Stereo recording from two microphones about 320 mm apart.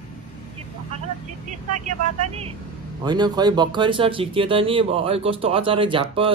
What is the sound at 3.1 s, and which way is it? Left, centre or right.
Speech, centre.